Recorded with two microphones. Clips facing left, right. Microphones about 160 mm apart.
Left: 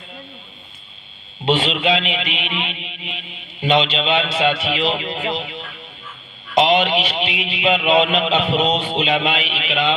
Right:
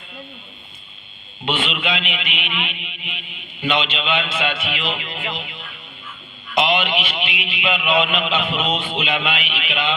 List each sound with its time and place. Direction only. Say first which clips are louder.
1.5 s a man's voice: left 6 dB; 35° left (ahead or behind)